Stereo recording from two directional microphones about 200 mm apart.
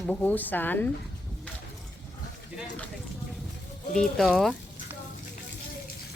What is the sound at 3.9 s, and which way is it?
Speech, 5° left (ahead or behind).